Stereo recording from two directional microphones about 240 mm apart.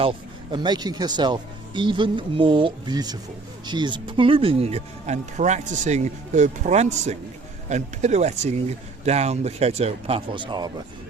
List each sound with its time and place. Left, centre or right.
0.0 s speech: right